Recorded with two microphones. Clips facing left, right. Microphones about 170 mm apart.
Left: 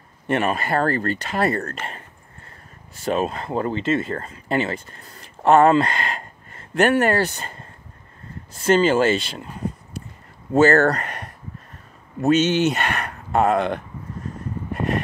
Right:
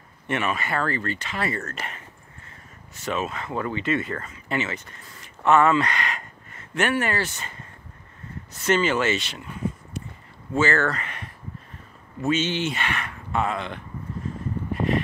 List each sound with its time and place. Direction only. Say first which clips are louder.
0.3 s speech: left 5 dB; 40° left (ahead or behind)